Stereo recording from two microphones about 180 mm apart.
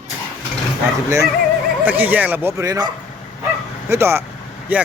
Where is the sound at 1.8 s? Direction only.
10° right (ahead or behind).